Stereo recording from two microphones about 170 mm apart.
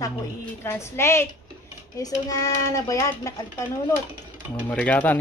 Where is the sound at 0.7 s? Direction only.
15° left (ahead or behind).